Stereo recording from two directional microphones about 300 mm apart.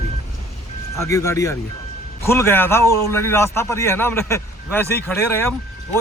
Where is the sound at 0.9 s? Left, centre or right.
Centre.